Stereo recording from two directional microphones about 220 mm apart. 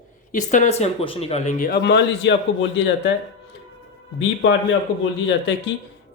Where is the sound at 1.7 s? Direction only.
50° left (ahead or behind).